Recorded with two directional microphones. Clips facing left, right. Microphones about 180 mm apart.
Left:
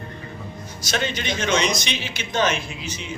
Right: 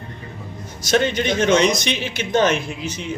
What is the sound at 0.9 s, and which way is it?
A man's voice, 55° right (ahead or behind).